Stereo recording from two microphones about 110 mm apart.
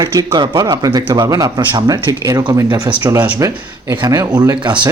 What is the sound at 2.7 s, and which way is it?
Speech, 45° right (ahead or behind).